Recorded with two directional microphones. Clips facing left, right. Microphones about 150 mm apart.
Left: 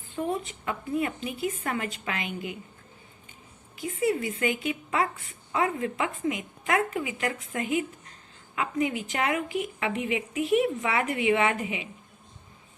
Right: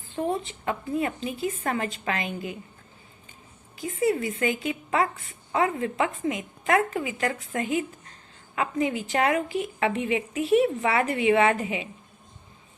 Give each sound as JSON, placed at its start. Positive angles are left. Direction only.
{"t": 0.2, "sound": "a woman's voice", "side_deg": -30}
{"t": 4.0, "sound": "a woman's voice", "side_deg": -35}